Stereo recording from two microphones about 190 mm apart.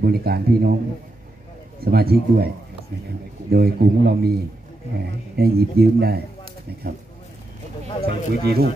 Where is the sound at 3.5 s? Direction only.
55° right (ahead or behind).